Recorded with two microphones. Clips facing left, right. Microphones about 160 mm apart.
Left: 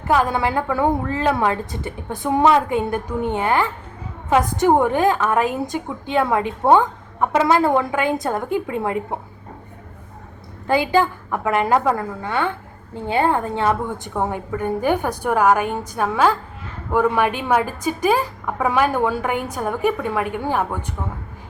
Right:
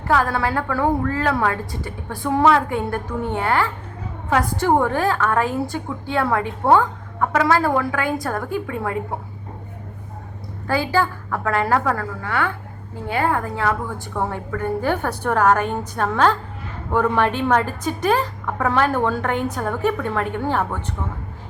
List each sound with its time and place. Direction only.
0.1 s a woman's voice: 20° left (ahead or behind)
10.7 s a woman's voice: 20° left (ahead or behind)